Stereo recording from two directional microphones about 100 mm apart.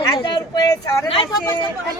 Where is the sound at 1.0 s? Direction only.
60° left (ahead or behind).